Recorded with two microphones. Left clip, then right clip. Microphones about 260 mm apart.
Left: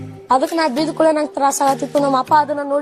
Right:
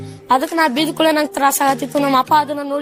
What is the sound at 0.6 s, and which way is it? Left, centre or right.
Speech, right.